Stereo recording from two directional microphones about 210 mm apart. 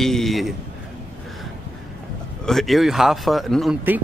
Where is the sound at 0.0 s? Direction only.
Centre (ahead or behind).